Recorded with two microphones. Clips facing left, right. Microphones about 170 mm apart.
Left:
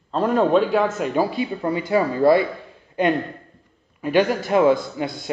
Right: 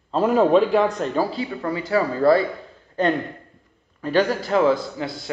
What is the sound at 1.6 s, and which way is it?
A man's voice, 20° left (ahead or behind).